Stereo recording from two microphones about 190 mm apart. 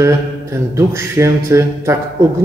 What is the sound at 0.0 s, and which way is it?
A man's voice, 15° right (ahead or behind).